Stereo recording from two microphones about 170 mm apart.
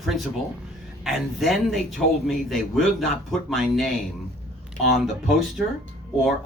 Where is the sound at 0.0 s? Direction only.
Centre (ahead or behind).